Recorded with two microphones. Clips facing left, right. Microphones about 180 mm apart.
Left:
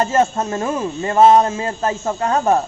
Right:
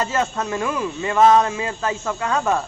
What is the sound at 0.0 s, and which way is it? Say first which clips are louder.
A man's voice: left 5 dB; 45° left (ahead or behind).